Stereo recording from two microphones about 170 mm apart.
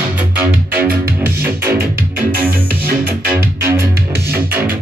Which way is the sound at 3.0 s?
15° right (ahead or behind).